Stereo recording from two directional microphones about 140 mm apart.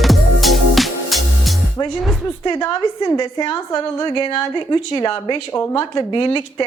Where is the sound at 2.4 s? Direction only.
25° left (ahead or behind).